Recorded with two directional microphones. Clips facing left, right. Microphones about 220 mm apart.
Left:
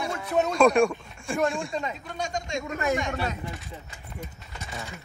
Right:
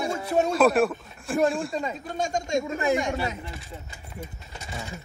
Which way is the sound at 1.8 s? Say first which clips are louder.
Right 3 dB; 40° right (ahead or behind).